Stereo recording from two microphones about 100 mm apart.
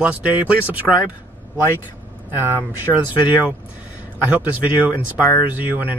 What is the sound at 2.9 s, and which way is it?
Speech, 5° left (ahead or behind).